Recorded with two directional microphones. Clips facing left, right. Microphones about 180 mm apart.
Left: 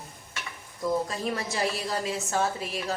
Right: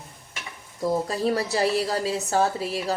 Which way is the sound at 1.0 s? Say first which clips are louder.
Right 6 dB; 35° right (ahead or behind).